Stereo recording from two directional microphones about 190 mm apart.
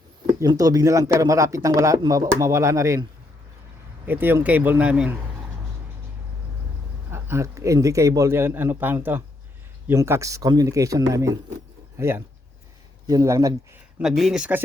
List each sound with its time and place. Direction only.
0.3 s a man's voice: 20° right (ahead or behind)
7.1 s a man's voice: 15° right (ahead or behind)
14.0 s speech: centre (ahead or behind)